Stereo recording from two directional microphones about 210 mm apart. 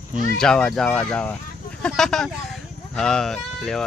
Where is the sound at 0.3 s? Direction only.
5° left (ahead or behind).